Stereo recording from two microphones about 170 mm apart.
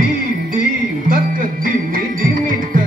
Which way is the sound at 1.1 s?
55° right (ahead or behind).